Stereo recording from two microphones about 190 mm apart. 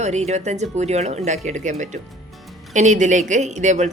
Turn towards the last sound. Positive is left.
turn(degrees=-40)  # may be behind; listen again after turning